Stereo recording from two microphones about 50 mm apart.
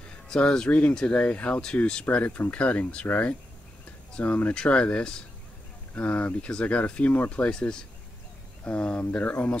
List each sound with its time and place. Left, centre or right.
0.3 s speech: centre; by 9.6 s left